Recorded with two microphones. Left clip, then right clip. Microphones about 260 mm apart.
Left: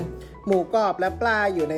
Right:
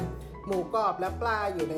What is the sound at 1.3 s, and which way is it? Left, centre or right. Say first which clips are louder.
Speech: left 7 dB; left.